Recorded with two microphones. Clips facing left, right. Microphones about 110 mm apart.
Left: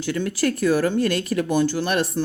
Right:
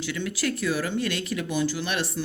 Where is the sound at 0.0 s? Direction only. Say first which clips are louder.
Left 6 dB; 45° left (ahead or behind).